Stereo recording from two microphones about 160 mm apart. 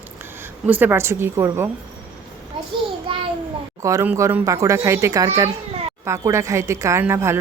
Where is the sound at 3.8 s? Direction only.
20° right (ahead or behind).